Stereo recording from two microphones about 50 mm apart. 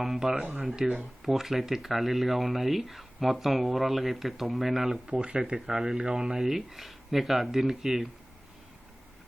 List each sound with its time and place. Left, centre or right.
0.0 s speech: centre
1.2 s speech: centre
5.0 s speech: right
5.5 s speech: centre